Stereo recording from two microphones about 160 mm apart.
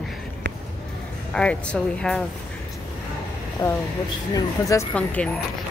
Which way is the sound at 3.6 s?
25° left (ahead or behind).